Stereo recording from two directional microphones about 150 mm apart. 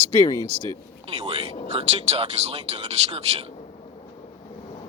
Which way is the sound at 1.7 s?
40° right (ahead or behind).